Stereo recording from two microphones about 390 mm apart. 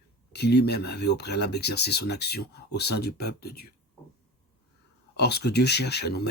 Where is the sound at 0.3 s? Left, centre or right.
Left.